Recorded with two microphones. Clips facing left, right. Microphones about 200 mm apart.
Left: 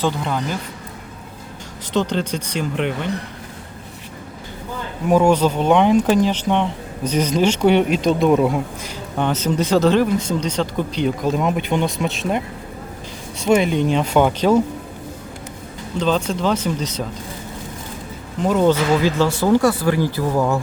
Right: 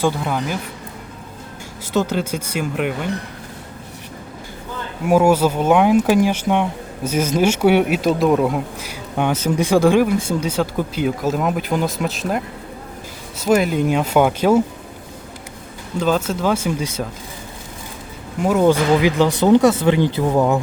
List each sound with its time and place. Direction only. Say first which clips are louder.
0.0 s speech: right 1 dB; 10° right (ahead or behind)
1.9 s speech: right 1 dB; 5° right (ahead or behind)
5.0 s speech: right 1 dB; 10° right (ahead or behind)
13.4 s speech: even; centre (ahead or behind)
16.0 s speech: right 1 dB; 5° right (ahead or behind)
18.4 s speech: right 1 dB; 10° right (ahead or behind)